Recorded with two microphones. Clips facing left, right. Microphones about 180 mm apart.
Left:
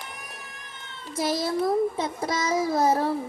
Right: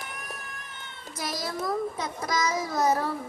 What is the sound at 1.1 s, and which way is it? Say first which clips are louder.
A child's voice: left 8 dB; 25° left (ahead or behind).